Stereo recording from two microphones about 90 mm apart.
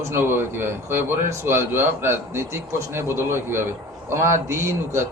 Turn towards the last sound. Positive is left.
turn(degrees=-30)  # may be behind; listen again after turning